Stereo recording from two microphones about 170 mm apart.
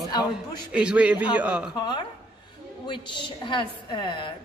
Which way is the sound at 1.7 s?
25° left (ahead or behind).